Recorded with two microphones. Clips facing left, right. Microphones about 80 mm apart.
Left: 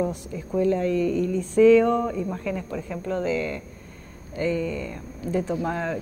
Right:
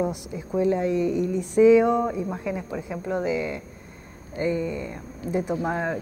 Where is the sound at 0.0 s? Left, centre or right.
Centre.